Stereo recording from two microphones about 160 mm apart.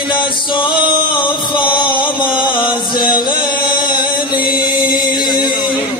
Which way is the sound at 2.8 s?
30° left (ahead or behind).